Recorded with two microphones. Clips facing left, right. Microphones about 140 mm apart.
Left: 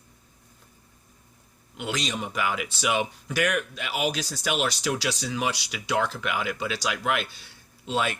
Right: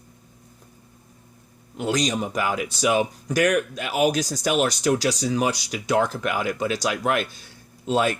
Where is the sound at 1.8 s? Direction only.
40° right (ahead or behind).